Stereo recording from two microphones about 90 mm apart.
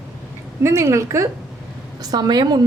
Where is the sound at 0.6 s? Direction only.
35° right (ahead or behind).